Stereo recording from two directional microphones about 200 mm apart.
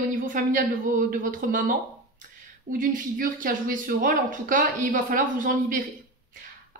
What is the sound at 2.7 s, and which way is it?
Speech, 45° right (ahead or behind).